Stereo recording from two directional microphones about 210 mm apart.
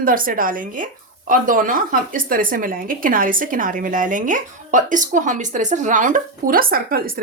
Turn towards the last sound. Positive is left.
turn(degrees=-45)  # may be behind; listen again after turning